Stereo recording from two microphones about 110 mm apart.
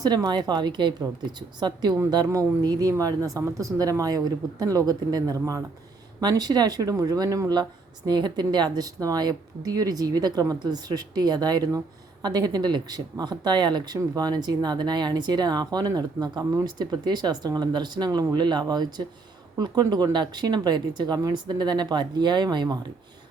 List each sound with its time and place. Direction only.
0.0 s speech: 35° right (ahead or behind)
16.7 s speech: 40° right (ahead or behind)